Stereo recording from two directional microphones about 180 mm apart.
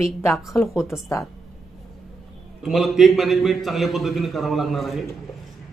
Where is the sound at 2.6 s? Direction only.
Centre (ahead or behind).